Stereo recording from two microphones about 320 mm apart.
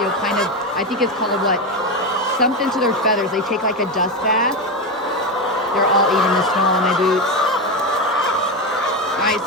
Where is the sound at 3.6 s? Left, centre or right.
Left.